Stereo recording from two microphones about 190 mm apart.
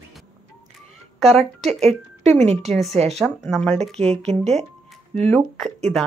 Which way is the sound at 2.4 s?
35° right (ahead or behind).